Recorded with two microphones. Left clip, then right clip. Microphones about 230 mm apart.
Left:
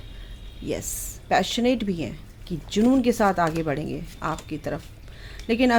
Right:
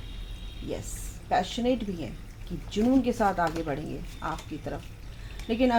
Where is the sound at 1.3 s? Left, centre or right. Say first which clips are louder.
Left 5 dB; left.